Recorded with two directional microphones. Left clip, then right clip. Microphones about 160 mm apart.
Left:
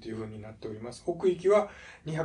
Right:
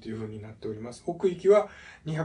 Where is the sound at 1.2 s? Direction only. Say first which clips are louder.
Right 3 dB; 25° left (ahead or behind).